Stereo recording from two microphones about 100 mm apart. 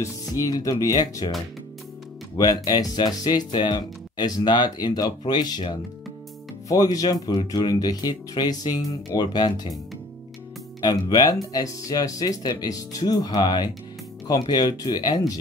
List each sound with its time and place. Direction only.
0.0 s speech: 40° left (ahead or behind)
2.3 s speech: 40° left (ahead or behind)
6.7 s speech: 35° left (ahead or behind)
10.8 s speech: 40° left (ahead or behind)